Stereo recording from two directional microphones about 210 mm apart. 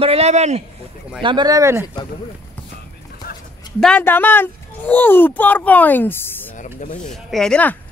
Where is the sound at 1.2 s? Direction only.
20° right (ahead or behind).